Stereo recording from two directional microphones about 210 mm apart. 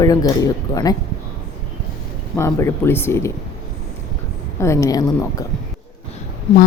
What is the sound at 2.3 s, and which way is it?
Speech, 15° left (ahead or behind).